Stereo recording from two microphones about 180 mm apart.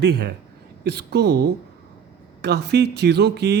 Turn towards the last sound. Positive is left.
turn(degrees=-65)  # may be behind; listen again after turning